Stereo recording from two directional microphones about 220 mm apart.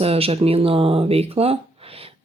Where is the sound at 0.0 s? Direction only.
25° right (ahead or behind).